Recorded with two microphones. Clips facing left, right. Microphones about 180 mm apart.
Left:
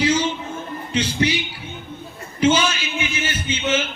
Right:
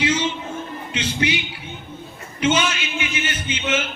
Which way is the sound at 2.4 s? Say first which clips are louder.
Left 2 dB; 30° left (ahead or behind).